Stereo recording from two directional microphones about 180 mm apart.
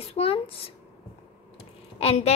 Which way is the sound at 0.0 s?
30° left (ahead or behind).